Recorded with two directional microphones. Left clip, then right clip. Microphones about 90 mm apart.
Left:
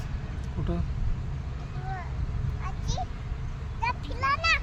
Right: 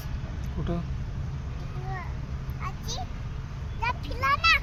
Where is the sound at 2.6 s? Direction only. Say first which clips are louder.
Even; 15° left (ahead or behind).